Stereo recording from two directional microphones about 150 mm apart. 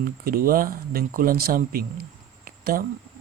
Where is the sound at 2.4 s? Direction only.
80° right.